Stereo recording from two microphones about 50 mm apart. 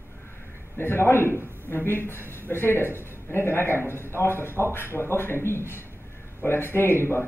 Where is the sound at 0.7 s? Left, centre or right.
Left.